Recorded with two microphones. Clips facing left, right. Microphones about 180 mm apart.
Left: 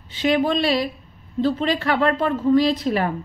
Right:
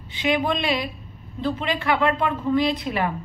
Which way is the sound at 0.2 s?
40° left (ahead or behind).